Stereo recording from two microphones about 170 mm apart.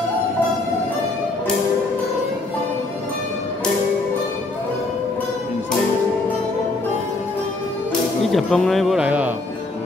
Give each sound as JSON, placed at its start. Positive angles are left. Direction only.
{"t": 8.3, "sound": "speech", "side_deg": 0}